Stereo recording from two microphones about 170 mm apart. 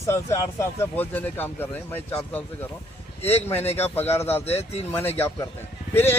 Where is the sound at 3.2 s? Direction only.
35° left (ahead or behind).